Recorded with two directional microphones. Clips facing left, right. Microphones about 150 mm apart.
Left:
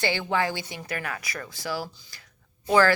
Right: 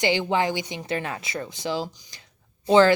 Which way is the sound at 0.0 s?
20° right (ahead or behind).